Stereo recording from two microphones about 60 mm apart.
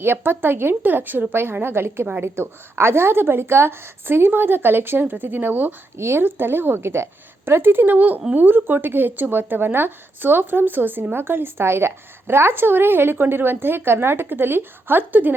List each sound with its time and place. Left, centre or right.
0.0 s speech: right